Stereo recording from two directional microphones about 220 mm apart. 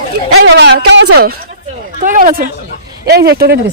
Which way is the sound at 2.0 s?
35° right (ahead or behind).